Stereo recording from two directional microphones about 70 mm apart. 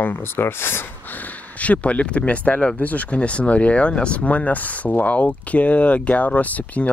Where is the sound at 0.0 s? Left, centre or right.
Left.